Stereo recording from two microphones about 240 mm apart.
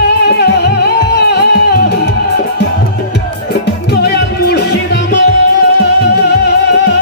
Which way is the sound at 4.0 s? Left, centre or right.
Left.